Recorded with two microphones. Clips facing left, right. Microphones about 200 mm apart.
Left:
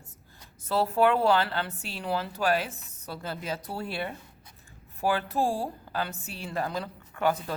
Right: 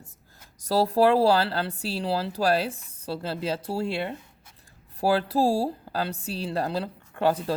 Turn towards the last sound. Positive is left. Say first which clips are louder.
# right 3 dB
turn(degrees=-30)  # may be behind; listen again after turning